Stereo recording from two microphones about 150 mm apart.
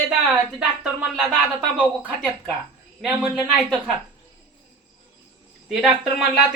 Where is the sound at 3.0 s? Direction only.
Centre (ahead or behind).